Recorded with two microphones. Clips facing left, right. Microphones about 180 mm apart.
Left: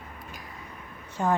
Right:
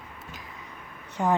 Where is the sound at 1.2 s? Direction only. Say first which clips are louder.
Right 1 dB; 15° right (ahead or behind).